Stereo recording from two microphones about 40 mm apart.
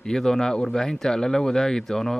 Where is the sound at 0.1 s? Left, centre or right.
Centre.